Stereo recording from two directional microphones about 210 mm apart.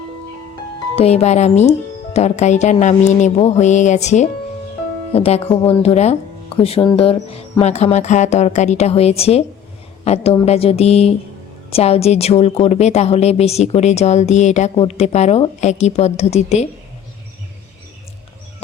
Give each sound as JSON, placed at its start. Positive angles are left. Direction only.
{"t": 0.9, "sound": "speech", "side_deg": 30}